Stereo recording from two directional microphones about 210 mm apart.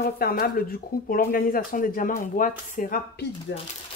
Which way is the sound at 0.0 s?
45° left (ahead or behind).